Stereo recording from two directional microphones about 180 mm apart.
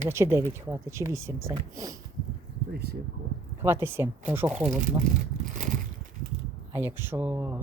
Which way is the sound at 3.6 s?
10° right (ahead or behind).